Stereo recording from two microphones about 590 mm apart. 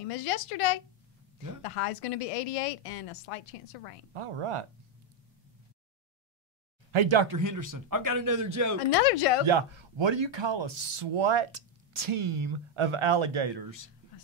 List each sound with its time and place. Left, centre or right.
0.1 s a woman's voice: left
4.1 s speech: right
6.9 s speech: right
7.3 s a man's voice: right
8.7 s speech: left
9.5 s speech: right